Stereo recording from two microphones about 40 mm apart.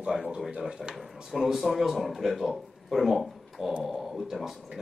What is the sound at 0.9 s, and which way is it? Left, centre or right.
Speech, centre.